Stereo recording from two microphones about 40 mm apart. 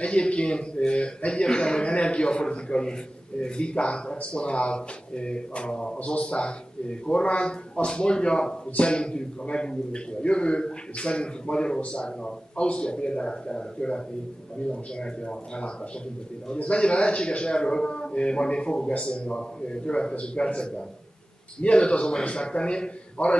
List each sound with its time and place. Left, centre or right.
0.0 s speech: left